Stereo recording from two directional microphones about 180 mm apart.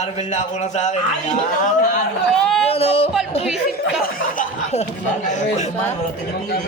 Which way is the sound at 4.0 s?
50° left (ahead or behind).